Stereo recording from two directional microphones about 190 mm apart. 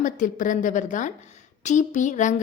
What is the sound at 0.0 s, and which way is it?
A woman's voice, 45° left (ahead or behind).